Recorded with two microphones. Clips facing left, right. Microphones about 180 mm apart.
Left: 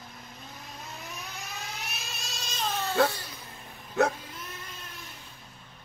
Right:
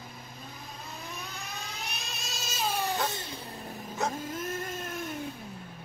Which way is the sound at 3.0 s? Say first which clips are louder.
Left 2 dB; 25° right (ahead or behind).